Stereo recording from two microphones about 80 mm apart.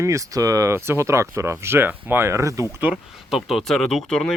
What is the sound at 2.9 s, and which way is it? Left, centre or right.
Speech, centre.